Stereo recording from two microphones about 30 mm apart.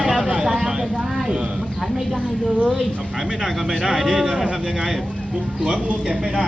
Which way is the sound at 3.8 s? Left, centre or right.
Centre.